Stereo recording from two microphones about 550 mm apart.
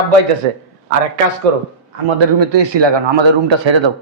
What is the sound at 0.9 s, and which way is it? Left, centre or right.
Speech, right.